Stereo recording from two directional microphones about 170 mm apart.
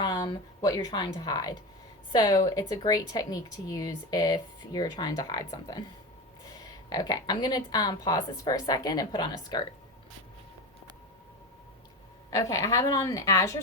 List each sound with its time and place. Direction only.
0.0 s a woman's voice: 25° left (ahead or behind)
6.9 s speech: 25° left (ahead or behind)
12.3 s speech: 20° left (ahead or behind)